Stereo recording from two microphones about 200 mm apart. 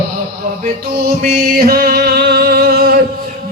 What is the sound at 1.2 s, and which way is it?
Music, 50° right (ahead or behind).